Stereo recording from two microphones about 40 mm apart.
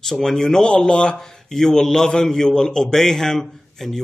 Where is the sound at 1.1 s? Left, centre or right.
Centre.